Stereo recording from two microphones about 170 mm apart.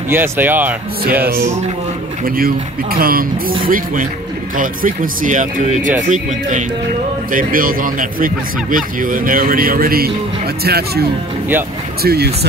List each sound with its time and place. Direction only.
0.1 s speech: 10° right (ahead or behind)
2.2 s a man's voice: 60° right (ahead or behind)